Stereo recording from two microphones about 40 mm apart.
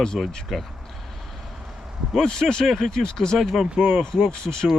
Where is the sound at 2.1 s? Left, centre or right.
Centre.